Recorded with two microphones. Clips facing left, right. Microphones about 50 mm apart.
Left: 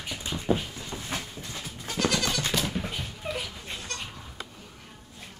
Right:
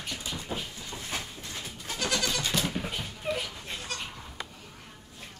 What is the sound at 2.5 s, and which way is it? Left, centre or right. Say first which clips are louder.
Dog: left 1 dB; centre.